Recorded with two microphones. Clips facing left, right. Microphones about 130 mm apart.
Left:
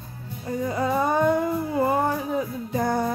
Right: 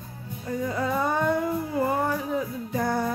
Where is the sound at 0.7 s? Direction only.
20° left (ahead or behind).